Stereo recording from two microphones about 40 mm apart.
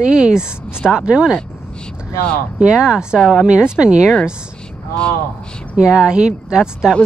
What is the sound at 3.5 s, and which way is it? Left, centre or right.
Speech, right.